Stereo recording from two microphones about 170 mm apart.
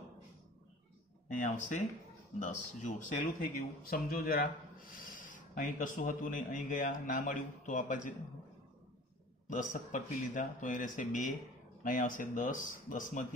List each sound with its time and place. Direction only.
1.4 s speech: 45° left (ahead or behind)
9.5 s speech: 50° left (ahead or behind)